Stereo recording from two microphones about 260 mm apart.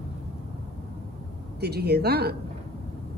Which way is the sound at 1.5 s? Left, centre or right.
Right.